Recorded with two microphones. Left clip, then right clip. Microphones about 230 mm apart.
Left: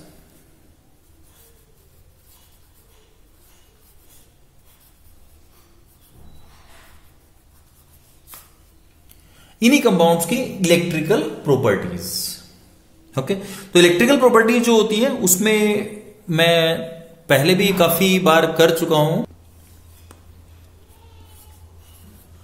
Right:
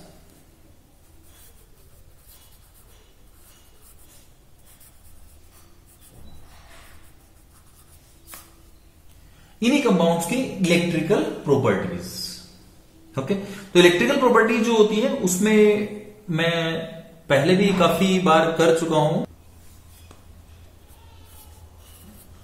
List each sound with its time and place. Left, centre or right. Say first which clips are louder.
9.6 s speech: left 5 dB; left
13.1 s speech: left 3 dB; left